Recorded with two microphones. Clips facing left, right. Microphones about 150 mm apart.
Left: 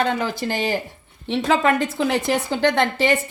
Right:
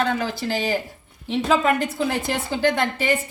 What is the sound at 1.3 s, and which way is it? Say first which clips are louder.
A woman's voice: left 1 dB; 80° left.